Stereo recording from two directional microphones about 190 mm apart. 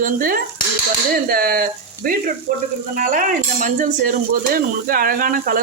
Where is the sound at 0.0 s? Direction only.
50° right (ahead or behind).